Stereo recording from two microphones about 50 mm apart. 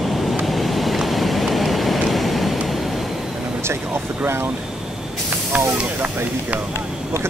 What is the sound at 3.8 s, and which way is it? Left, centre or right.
Vehicle, centre.